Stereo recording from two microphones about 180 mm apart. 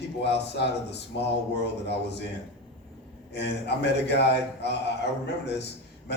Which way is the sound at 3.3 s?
70° left (ahead or behind).